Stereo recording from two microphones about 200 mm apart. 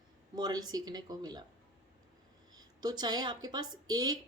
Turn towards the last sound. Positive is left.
turn(degrees=-20)  # may be behind; listen again after turning